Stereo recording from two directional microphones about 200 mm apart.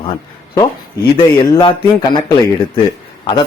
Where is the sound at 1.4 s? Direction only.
15° left (ahead or behind).